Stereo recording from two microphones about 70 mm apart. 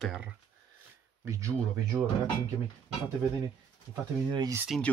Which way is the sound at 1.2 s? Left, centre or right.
Right.